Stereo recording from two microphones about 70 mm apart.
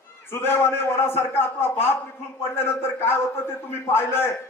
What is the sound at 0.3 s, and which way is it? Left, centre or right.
A man's voice, left.